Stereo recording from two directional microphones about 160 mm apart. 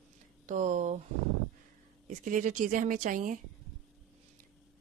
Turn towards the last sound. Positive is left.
turn(degrees=-55)  # may be behind; listen again after turning